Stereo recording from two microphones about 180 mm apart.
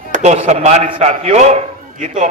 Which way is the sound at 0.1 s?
40° right (ahead or behind).